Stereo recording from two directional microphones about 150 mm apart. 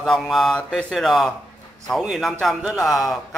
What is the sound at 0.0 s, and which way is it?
A man's voice, centre (ahead or behind).